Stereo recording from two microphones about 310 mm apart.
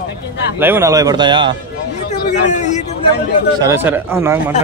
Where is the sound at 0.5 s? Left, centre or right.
Centre.